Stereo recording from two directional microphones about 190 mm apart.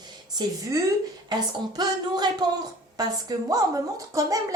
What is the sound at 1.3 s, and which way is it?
A woman's voice, 20° right (ahead or behind).